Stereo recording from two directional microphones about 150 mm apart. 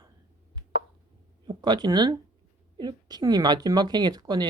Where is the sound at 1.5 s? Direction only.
30° right (ahead or behind).